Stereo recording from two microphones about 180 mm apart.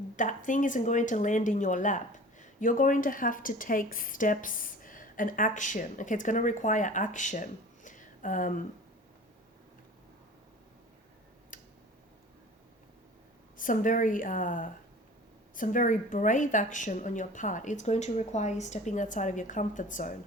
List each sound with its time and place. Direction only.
0.2 s speech: 45° left (ahead or behind)
7.9 s a sound: 45° left (ahead or behind)
11.5 s tick: 45° left (ahead or behind)
13.6 s speech: 45° left (ahead or behind)